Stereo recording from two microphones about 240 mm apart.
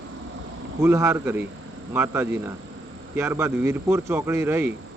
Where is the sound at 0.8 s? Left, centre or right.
Centre.